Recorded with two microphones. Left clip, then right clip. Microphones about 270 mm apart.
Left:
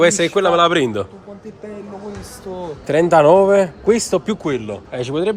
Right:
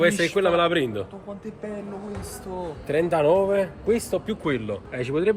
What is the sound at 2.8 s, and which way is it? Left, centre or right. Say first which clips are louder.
Speech: left 9 dB; left.